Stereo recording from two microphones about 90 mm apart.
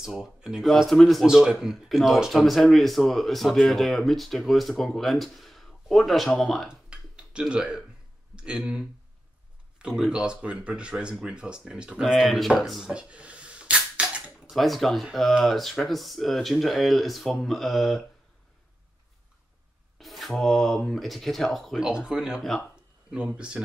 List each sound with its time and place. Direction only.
0.0 s speech: 5° right (ahead or behind)
6.7 s a sound: 10° right (ahead or behind)
8.4 s speech: 10° right (ahead or behind)
14.5 s speech: centre (ahead or behind)
20.0 s speech: centre (ahead or behind)